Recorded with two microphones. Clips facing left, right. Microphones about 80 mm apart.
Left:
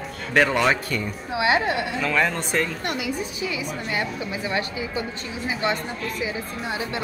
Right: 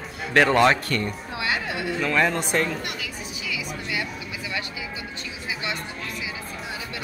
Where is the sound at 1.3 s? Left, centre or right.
Left.